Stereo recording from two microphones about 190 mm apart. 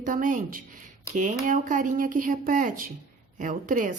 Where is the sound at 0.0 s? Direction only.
45° right (ahead or behind).